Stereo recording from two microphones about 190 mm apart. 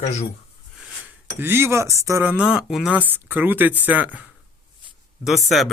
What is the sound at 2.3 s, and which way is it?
Speech, 5° right (ahead or behind).